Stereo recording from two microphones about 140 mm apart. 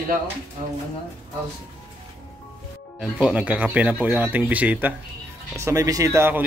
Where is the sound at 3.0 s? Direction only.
5° right (ahead or behind).